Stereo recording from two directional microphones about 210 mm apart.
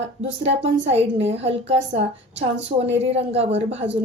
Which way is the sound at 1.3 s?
30° right (ahead or behind).